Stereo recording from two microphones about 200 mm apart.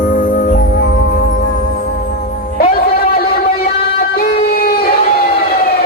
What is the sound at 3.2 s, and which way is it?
Music, 50° left (ahead or behind).